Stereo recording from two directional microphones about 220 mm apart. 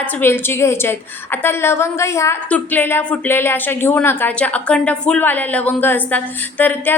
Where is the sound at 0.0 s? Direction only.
10° left (ahead or behind).